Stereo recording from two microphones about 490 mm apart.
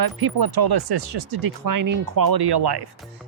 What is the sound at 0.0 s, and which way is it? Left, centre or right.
Speech, right.